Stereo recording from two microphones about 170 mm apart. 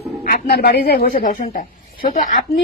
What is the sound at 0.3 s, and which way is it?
A woman's voice, 65° left (ahead or behind).